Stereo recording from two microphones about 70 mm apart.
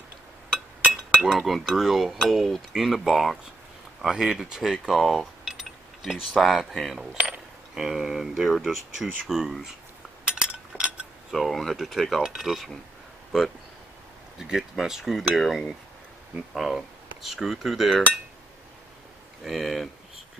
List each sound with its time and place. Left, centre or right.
1.2 s speech: centre
7.2 s coin: centre
7.7 s speech: centre
10.2 s a sound: centre
11.3 s speech: centre
14.4 s speech: centre
19.4 s speech: centre